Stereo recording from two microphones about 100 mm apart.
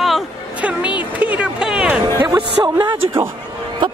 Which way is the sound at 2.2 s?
35° right (ahead or behind).